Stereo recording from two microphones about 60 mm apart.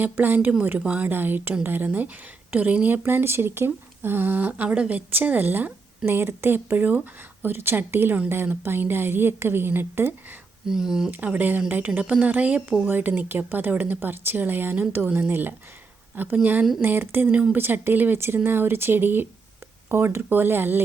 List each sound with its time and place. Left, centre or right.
0.0 s speech: right
3.0 s speech: right
10.7 s speech: centre
11.1 s speech: right